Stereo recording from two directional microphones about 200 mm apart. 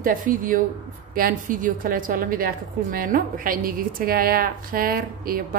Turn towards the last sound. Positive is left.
turn(degrees=-45)  # may be behind; listen again after turning